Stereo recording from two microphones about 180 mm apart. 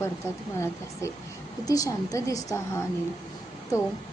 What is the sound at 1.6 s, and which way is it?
Speech, 20° left (ahead or behind).